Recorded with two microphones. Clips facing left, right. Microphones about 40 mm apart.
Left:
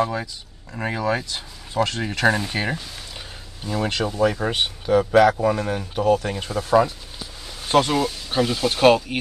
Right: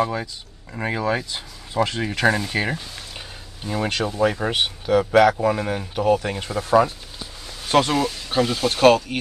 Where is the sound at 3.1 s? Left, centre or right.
Centre.